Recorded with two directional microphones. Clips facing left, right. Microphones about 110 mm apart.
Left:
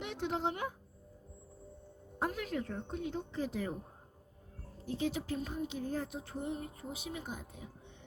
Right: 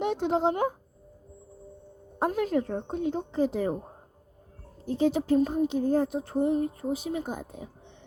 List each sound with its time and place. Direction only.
0.0 s speech: 30° right (ahead or behind)
2.1 s speech: 30° right (ahead or behind)
4.9 s speech: 35° right (ahead or behind)